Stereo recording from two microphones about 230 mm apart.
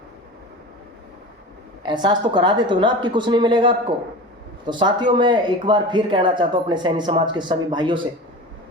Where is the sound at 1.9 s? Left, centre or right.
Centre.